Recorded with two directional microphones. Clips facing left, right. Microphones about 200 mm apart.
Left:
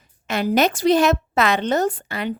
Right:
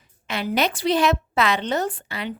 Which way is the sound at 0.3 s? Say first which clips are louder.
Left 5 dB; 45° left (ahead or behind).